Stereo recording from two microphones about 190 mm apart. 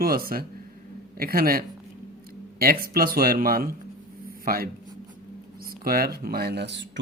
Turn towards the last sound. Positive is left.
turn(degrees=-65)  # may be behind; listen again after turning